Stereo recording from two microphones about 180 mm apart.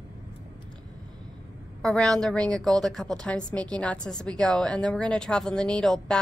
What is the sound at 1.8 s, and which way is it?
A woman's voice, 5° left (ahead or behind).